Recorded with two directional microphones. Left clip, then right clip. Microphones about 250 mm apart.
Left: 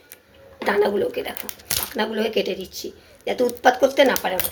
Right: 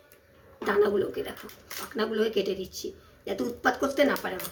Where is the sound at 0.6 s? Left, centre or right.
Centre.